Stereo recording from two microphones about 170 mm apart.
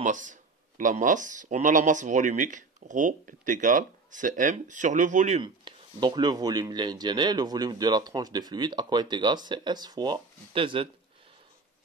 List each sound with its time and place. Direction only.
0.0 s speech: 50° right (ahead or behind)
5.4 s speech: 25° right (ahead or behind)